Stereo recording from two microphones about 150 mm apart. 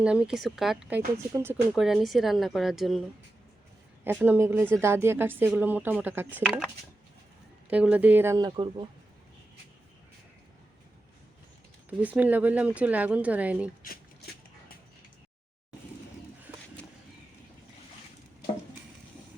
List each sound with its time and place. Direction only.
0.0 s speech: 5° right (ahead or behind)
1.7 s speech: centre (ahead or behind)
4.0 s speech: 15° right (ahead or behind)
7.7 s speech: 10° right (ahead or behind)
8.4 s speech: 30° right (ahead or behind)
11.9 s speech: 10° right (ahead or behind)
13.8 s a sound: 80° left